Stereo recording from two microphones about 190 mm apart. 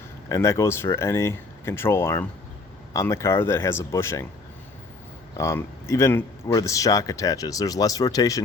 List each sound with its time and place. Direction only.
0.3 s speech: 15° left (ahead or behind)
5.4 s speech: 15° left (ahead or behind)